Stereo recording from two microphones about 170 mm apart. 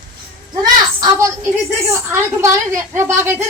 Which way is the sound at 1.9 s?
15° right (ahead or behind).